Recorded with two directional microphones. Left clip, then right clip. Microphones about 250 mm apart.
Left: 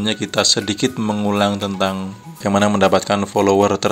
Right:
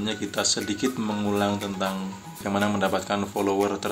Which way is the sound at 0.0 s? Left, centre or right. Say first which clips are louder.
Left 9 dB; left.